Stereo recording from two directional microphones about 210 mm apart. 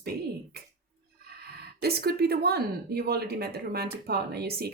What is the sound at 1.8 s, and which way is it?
Speech, 50° right (ahead or behind).